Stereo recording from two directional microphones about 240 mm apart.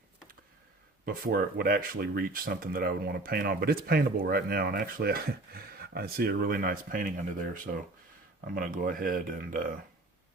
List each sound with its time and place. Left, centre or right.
1.0 s speech: right